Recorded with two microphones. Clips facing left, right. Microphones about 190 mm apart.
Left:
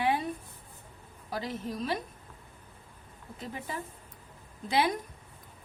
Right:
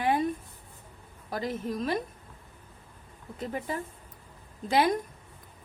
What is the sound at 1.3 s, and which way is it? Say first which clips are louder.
Speech: right 3 dB; 50° right (ahead or behind).